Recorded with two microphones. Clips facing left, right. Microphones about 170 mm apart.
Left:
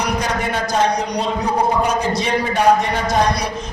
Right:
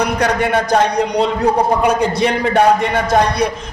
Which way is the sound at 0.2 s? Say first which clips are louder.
Right 6 dB; 60° right (ahead or behind).